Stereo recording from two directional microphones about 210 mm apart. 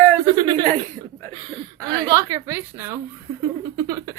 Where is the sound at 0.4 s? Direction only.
25° right (ahead or behind).